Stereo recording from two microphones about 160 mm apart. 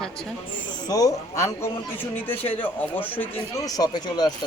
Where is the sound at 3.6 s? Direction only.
25° left (ahead or behind).